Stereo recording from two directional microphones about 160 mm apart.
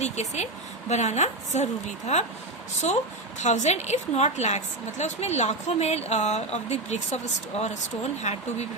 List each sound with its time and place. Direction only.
0.0 s a woman's voice: 45° left (ahead or behind)